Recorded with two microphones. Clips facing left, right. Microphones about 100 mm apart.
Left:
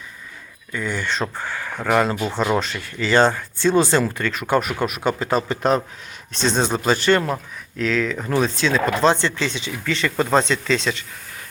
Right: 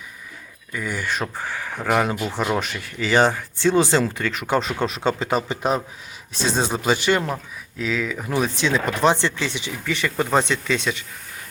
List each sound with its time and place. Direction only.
0.7 s speech: 10° right (ahead or behind)
2.1 s speech: 20° left (ahead or behind)
2.6 s a man's voice: 15° right (ahead or behind)